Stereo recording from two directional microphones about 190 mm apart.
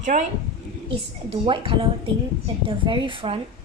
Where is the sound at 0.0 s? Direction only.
40° right (ahead or behind).